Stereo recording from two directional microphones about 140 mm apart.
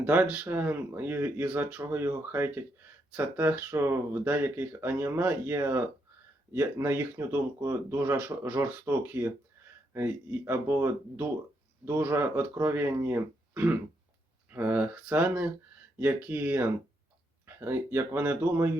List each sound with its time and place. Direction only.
0.0 s speech: 10° right (ahead or behind)